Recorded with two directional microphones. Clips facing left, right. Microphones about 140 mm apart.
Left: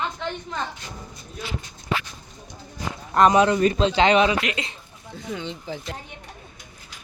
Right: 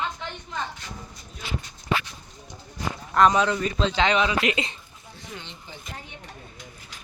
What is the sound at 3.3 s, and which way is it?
Speech, 5° left (ahead or behind).